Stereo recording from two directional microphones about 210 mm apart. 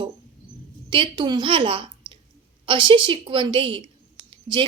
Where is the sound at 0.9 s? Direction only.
20° right (ahead or behind).